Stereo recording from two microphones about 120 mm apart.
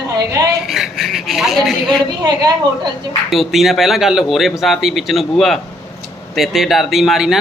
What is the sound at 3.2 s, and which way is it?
A man's voice, centre (ahead or behind).